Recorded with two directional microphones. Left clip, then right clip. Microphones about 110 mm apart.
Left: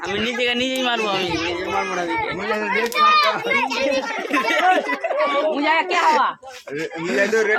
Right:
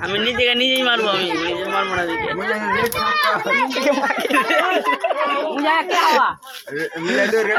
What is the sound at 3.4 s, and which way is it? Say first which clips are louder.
Speech: right 2 dB; 45° left (ahead or behind).